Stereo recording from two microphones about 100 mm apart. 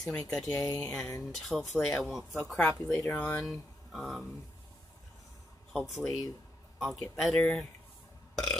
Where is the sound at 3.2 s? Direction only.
15° left (ahead or behind).